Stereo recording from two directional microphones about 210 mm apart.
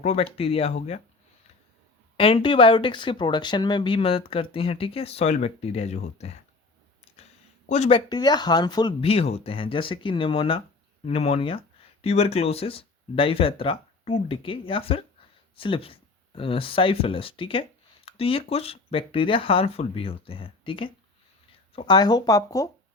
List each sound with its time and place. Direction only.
0.0 s speech: 30° left (ahead or behind)
2.1 s speech: 25° left (ahead or behind)
7.7 s speech: 30° left (ahead or behind)